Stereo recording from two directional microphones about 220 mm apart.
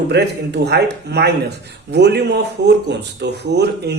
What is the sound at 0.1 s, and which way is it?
Speech, 50° right (ahead or behind).